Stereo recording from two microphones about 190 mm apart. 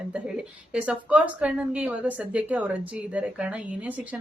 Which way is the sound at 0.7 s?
5° right (ahead or behind).